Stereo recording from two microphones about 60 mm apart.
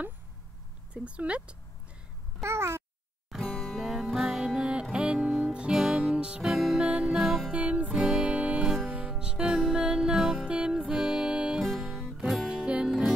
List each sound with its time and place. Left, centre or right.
0.9 s speech: centre
2.4 s a child's voice: right
3.3 s music: centre
6.4 s music: centre
6.8 s music: centre
7.5 s music: right; by 12.2 s centre
12.4 s music: centre
12.8 s music: centre